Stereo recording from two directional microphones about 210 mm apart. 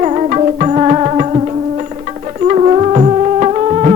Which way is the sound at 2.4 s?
30° right (ahead or behind).